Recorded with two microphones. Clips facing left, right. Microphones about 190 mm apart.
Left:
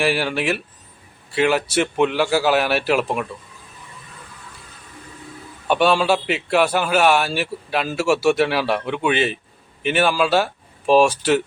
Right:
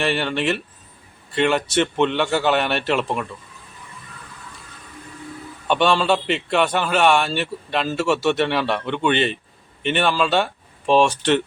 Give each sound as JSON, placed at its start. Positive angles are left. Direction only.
{"t": 0.0, "sound": "a man's voice", "side_deg": 5}
{"t": 5.6, "sound": "a man's voice", "side_deg": 10}